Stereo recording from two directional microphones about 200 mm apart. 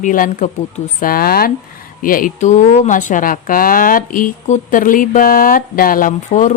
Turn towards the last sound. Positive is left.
turn(degrees=35)  # may be behind; listen again after turning